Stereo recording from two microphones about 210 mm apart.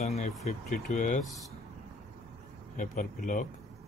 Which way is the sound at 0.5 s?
35° left (ahead or behind).